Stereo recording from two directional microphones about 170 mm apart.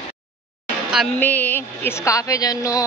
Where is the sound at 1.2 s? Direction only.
10° left (ahead or behind).